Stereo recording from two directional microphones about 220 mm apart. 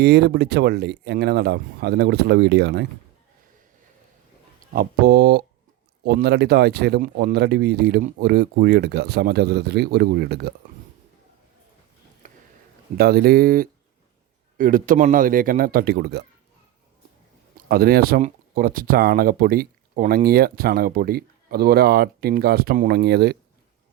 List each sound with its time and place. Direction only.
0.0 s speech: 50° right (ahead or behind)
4.7 s speech: 40° right (ahead or behind)
12.2 s a sound: 35° right (ahead or behind)
13.0 s a man's voice: 45° right (ahead or behind)
17.7 s speech: 45° right (ahead or behind)